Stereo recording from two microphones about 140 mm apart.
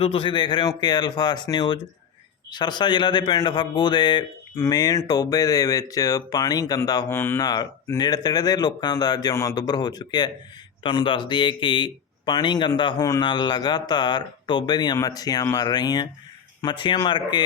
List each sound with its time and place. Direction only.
0.0 s speech: 40° left (ahead or behind)
7.1 s speech: 15° left (ahead or behind)
7.4 s speech: 30° left (ahead or behind)